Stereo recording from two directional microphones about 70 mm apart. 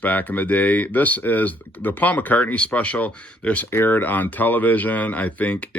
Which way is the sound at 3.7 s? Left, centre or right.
Left.